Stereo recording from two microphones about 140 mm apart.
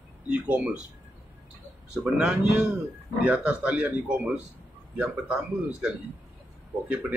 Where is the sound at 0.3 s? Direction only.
10° right (ahead or behind).